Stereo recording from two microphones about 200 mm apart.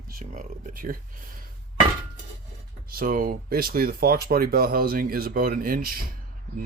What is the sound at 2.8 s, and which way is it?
Speech, 45° right (ahead or behind).